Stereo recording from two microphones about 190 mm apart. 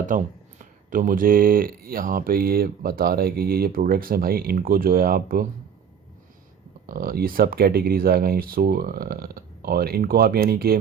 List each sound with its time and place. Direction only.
0.1 s speech: 45° right (ahead or behind)
6.8 s speech: 50° right (ahead or behind)